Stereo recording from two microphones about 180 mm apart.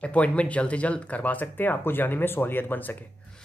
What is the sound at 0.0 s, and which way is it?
Speech, 5° left (ahead or behind).